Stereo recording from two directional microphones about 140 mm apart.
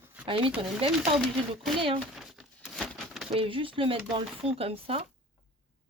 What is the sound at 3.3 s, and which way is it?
Speech, 40° right (ahead or behind).